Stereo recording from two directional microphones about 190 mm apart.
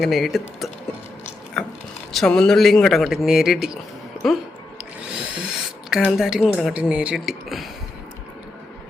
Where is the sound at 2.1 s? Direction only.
5° left (ahead or behind).